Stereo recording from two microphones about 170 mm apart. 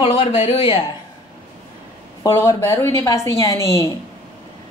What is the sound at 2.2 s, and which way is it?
A woman's voice, 15° left (ahead or behind).